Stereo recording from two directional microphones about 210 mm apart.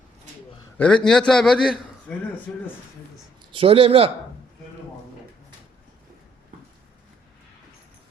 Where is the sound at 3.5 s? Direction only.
25° right (ahead or behind).